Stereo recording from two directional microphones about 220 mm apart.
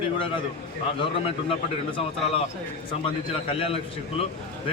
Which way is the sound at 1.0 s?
25° left (ahead or behind).